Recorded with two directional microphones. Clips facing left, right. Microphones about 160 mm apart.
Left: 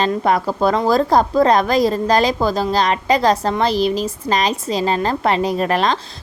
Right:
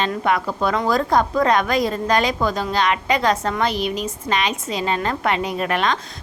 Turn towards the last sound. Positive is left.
turn(degrees=35)  # may be behind; listen again after turning